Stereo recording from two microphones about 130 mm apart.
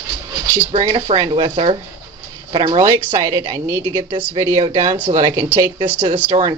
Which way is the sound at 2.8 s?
25° right (ahead or behind).